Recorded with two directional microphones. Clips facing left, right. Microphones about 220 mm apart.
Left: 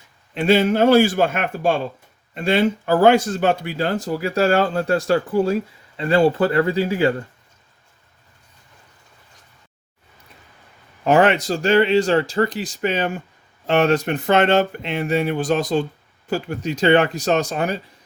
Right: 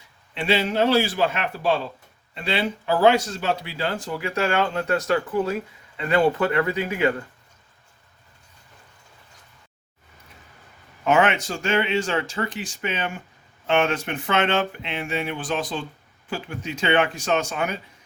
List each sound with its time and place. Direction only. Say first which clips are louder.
0.3 s a man's voice: left 6 dB; 45° left (ahead or behind)
11.0 s speech: left 5 dB; 35° left (ahead or behind)